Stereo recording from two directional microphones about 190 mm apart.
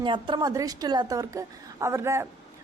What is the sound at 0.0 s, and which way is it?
A woman's voice, 25° right (ahead or behind).